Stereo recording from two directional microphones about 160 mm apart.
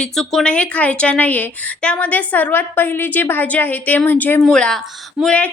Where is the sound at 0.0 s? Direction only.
Centre (ahead or behind).